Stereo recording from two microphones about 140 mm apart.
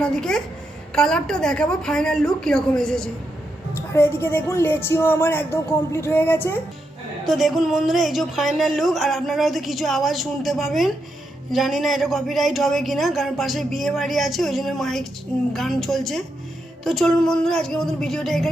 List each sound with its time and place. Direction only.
0.0 s speech: 5° left (ahead or behind)
3.9 s a woman's voice: 15° left (ahead or behind)
7.3 s speech: centre (ahead or behind)